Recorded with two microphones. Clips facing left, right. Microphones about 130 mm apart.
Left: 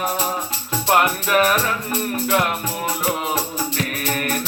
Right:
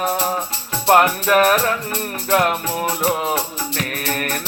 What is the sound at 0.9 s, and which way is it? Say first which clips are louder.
Music: right 4 dB; 40° right (ahead or behind).